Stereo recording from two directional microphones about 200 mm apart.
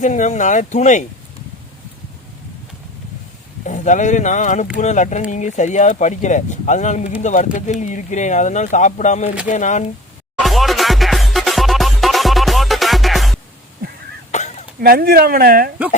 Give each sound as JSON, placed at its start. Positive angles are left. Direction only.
{"t": 0.0, "sound": "speech", "side_deg": 35}
{"t": 3.6, "sound": "speech", "side_deg": 40}
{"t": 10.4, "sound": "music", "side_deg": 0}
{"t": 14.3, "sound": "a sound", "side_deg": 35}
{"t": 14.8, "sound": "speech", "side_deg": -50}